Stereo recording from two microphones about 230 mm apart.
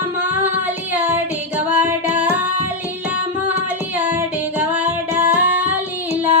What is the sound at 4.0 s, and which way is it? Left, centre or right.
Female singing, centre.